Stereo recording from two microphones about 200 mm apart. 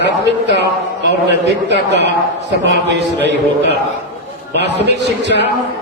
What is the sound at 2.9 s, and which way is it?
Speech, 60° right (ahead or behind).